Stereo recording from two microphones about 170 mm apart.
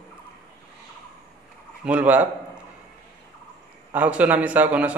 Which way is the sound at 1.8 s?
5° right (ahead or behind).